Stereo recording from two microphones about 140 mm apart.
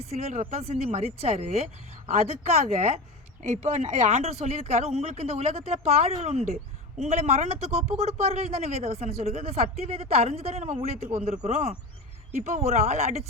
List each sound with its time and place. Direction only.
0.0 s speech: 50° right (ahead or behind)
2.0 s speech: 65° right (ahead or behind)